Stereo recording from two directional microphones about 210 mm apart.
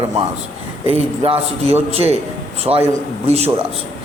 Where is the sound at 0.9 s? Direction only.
30° right (ahead or behind).